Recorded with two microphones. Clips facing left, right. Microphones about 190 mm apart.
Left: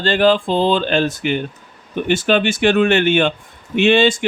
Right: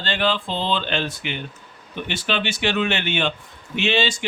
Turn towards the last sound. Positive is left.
turn(degrees=50)  # may be behind; listen again after turning